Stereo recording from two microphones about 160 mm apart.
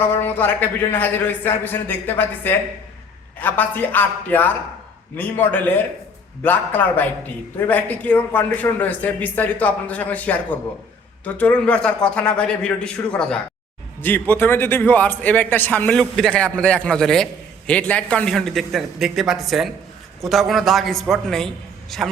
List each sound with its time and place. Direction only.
0.0 s a man's voice: 10° left (ahead or behind)